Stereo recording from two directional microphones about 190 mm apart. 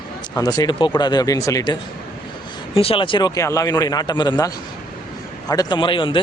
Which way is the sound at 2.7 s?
30° left (ahead or behind).